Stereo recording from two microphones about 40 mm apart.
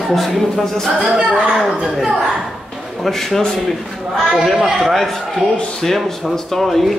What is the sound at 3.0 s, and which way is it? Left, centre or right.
Speech, centre.